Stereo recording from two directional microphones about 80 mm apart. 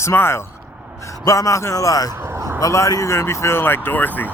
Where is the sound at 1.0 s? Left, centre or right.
Left.